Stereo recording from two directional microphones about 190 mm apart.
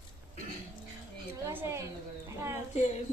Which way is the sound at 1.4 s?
15° right (ahead or behind).